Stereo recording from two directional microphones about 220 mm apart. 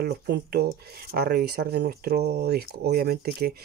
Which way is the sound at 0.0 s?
45° right (ahead or behind).